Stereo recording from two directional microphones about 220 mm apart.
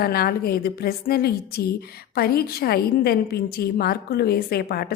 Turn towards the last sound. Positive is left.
turn(degrees=45)  # may be behind; listen again after turning